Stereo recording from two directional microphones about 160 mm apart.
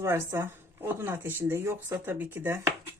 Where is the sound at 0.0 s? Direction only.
15° right (ahead or behind).